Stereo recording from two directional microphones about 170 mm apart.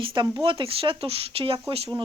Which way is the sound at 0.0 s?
30° right (ahead or behind).